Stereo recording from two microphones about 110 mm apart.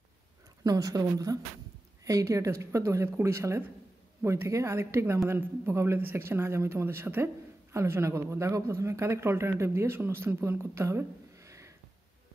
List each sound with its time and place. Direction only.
0.7 s speech: 35° right (ahead or behind)